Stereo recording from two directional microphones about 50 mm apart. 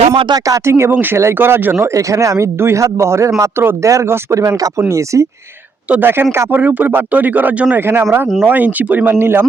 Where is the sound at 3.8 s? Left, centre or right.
Right.